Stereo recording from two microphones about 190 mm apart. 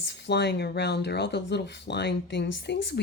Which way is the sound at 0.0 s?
65° left (ahead or behind).